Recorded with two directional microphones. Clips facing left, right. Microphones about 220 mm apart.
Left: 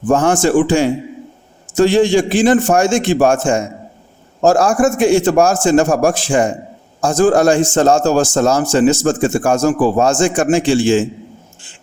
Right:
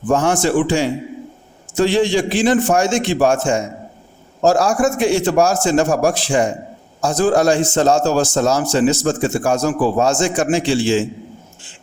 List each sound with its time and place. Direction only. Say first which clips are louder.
0.1 s a man's voice: left 3 dB; 50° left (ahead or behind)